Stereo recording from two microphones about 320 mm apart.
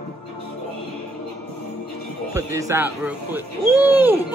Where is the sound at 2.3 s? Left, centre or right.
Centre.